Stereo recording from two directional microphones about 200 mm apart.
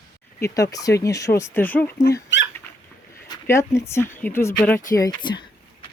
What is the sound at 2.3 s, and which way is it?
Rodents, 65° left (ahead or behind).